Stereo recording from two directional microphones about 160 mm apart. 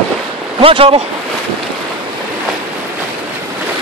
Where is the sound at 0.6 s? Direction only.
35° right (ahead or behind).